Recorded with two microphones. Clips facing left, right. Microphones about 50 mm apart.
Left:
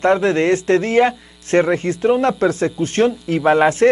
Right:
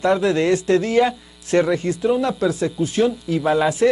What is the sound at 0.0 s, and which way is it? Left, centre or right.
Speech, left.